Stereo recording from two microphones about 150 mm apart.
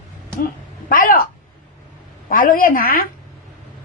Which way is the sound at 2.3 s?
70° left (ahead or behind).